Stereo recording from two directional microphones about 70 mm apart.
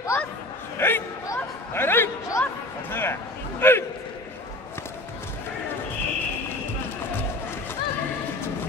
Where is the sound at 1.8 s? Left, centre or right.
Left.